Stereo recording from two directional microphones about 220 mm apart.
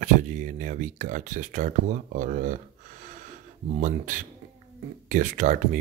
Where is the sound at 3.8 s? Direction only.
35° right (ahead or behind).